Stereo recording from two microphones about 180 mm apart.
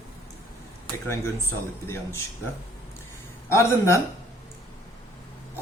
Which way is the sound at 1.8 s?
15° left (ahead or behind).